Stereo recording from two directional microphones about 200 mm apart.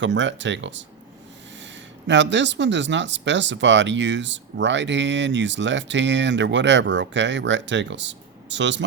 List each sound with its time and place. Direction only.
0.0 s speech: 65° right (ahead or behind)
2.0 s speech: 65° right (ahead or behind)